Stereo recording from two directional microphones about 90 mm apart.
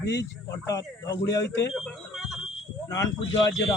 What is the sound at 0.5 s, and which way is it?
Speech, 40° left (ahead or behind).